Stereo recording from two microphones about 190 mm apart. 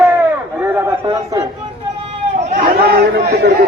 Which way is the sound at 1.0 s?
20° right (ahead or behind).